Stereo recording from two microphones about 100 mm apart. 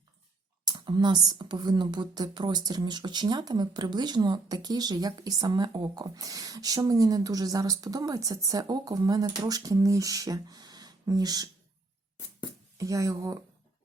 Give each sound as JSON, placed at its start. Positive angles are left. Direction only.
{"t": 0.9, "sound": "a woman's voice", "side_deg": -50}
{"t": 12.7, "sound": "speech", "side_deg": -35}